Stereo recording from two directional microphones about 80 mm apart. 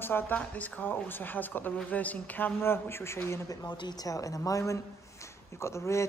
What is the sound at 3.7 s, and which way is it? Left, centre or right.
Speech, left.